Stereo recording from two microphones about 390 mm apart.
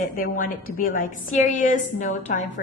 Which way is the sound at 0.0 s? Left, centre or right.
Left.